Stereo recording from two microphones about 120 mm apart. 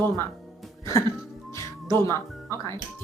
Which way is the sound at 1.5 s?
25° left (ahead or behind).